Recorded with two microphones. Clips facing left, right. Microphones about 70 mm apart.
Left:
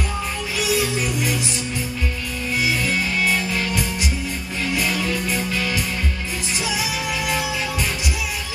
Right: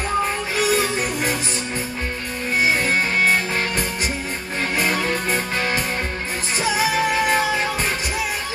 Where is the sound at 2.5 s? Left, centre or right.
Right.